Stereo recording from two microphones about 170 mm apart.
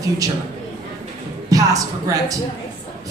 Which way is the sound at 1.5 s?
20° right (ahead or behind).